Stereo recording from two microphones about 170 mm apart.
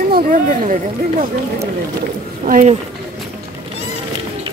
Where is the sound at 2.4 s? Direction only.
45° right (ahead or behind).